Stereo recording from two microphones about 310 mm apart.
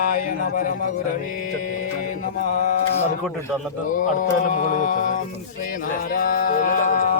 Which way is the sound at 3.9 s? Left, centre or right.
Left.